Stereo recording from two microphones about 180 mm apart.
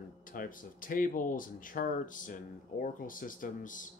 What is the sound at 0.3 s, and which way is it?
Speech, 50° left (ahead or behind).